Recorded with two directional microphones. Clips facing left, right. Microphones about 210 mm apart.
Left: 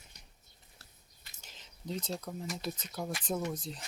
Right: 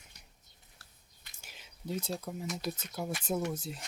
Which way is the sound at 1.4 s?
10° right (ahead or behind).